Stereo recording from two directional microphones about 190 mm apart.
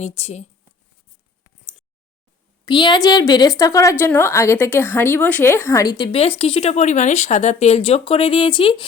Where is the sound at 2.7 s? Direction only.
25° left (ahead or behind).